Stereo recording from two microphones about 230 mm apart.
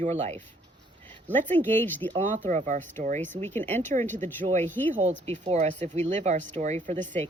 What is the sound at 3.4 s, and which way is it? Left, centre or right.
Speech, centre.